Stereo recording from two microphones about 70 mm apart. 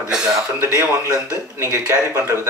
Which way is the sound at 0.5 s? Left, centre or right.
Right.